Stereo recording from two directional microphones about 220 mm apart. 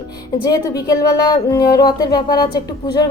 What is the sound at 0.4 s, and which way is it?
A woman's voice, 15° left (ahead or behind).